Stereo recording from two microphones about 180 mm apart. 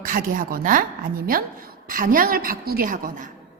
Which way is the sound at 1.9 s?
50° right (ahead or behind).